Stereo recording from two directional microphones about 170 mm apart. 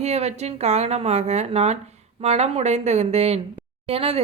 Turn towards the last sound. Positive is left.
turn(degrees=-35)  # may be behind; listen again after turning